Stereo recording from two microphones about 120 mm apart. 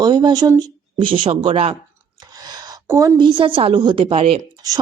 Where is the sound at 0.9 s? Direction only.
45° right (ahead or behind).